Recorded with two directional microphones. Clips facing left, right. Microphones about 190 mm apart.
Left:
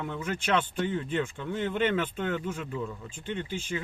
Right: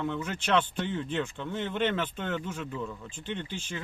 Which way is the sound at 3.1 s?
50° left (ahead or behind).